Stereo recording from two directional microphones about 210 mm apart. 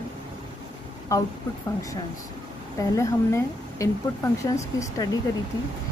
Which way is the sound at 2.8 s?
15° left (ahead or behind).